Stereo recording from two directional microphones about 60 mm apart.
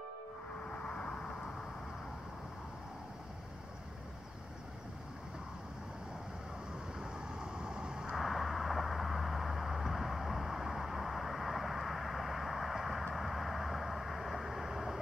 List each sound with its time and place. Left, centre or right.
0.7 s vehicle: centre
7.0 s vehicle: centre
8.2 s vehicle: centre